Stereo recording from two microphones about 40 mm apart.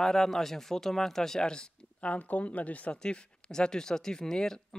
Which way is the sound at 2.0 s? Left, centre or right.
Left.